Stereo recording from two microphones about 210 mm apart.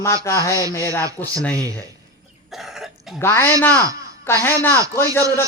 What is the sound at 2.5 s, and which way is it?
Cough, centre (ahead or behind).